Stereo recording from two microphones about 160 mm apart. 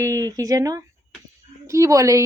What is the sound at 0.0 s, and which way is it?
A child's voice, 20° right (ahead or behind).